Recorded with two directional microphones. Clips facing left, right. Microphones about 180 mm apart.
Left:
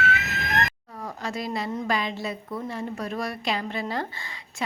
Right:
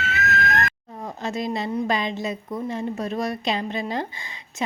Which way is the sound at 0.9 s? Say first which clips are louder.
Right 3 dB; 20° right (ahead or behind).